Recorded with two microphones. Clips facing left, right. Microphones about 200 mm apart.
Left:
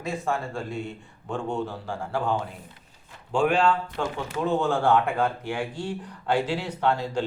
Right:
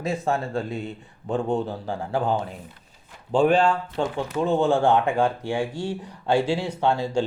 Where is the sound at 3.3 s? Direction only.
35° right (ahead or behind).